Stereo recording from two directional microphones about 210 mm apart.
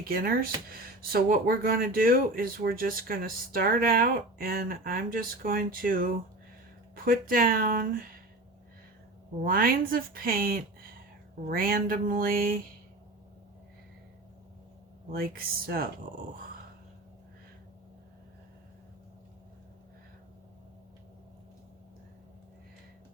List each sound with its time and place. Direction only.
0.0 s speech: 45° right (ahead or behind)
9.4 s speech: 45° right (ahead or behind)
15.1 s speech: 45° right (ahead or behind)